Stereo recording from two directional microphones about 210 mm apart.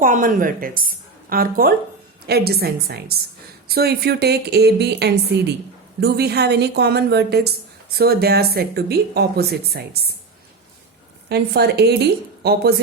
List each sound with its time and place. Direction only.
0.0 s a woman's voice: 40° right (ahead or behind)
11.3 s a woman's voice: 50° right (ahead or behind)